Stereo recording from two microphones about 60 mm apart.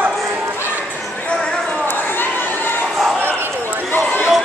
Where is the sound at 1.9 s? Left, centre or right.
Left.